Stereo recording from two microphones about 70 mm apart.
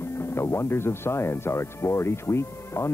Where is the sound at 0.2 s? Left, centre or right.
Left.